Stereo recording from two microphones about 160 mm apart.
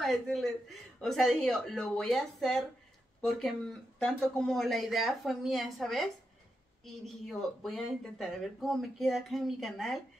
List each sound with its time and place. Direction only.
0.0 s speech: centre (ahead or behind)